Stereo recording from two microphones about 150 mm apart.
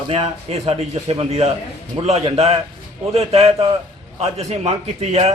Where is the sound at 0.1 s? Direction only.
40° right (ahead or behind).